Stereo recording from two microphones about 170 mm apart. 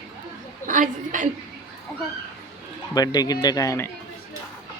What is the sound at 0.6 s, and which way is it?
Speech, 50° right (ahead or behind).